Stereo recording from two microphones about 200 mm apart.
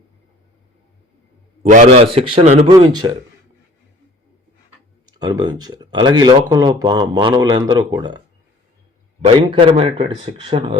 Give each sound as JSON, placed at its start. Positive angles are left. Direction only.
{"t": 1.6, "sound": "speech", "side_deg": -35}
{"t": 5.1, "sound": "speech", "side_deg": -20}
{"t": 9.2, "sound": "speech", "side_deg": -25}